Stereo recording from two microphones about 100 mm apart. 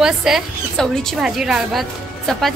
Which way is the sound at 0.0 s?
5° right (ahead or behind).